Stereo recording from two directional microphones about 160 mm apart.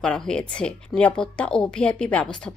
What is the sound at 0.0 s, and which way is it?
A woman's voice, 5° left (ahead or behind).